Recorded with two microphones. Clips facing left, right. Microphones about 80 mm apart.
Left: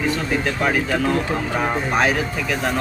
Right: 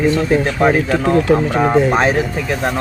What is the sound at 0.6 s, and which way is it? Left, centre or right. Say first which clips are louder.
Speech: right 6 dB; right.